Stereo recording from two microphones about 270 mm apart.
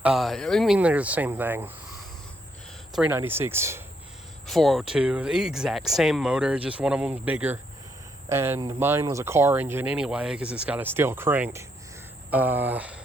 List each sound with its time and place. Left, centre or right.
0.0 s speech: centre
2.9 s speech: centre